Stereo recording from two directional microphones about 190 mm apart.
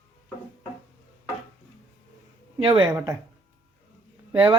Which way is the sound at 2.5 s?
25° right (ahead or behind).